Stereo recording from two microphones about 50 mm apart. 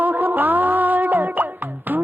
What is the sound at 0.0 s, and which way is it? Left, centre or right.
Music, right.